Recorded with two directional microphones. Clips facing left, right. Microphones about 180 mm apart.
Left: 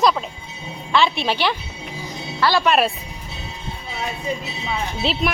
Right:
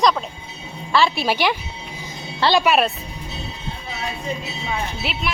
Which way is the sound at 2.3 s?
25° right (ahead or behind).